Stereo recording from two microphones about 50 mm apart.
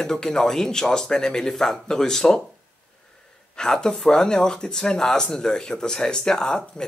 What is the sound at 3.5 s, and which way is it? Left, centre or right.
Speech, centre.